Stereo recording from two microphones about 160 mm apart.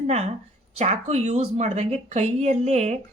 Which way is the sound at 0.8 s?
40° right (ahead or behind).